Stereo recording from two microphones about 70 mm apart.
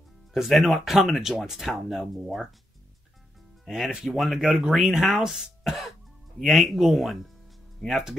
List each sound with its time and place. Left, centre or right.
0.3 s speech: centre
3.6 s speech: centre
4.4 s speech: centre